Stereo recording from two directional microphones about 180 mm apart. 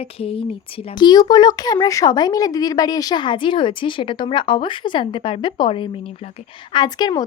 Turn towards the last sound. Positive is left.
turn(degrees=25)  # may be behind; listen again after turning